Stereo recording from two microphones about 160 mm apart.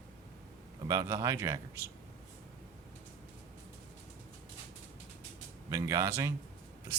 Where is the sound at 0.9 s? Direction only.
20° right (ahead or behind).